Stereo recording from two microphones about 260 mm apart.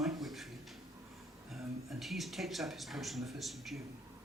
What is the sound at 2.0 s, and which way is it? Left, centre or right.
Speech, centre.